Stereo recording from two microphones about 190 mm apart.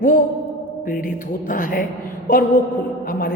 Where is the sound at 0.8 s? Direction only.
45° left (ahead or behind).